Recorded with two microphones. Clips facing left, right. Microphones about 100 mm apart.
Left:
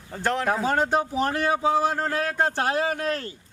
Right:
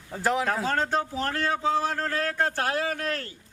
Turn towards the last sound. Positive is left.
turn(degrees=20)  # may be behind; listen again after turning